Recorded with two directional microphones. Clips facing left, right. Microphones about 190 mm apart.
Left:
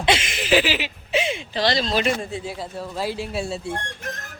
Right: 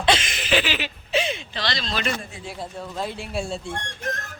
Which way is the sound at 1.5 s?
40° left (ahead or behind).